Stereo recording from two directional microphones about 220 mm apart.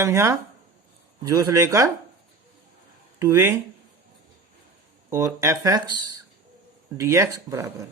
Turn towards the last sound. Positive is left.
turn(degrees=-15)  # may be behind; listen again after turning